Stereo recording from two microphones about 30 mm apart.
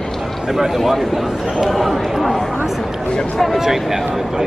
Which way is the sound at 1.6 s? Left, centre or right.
Centre.